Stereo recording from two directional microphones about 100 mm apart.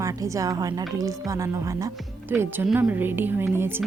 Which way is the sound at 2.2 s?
20° right (ahead or behind).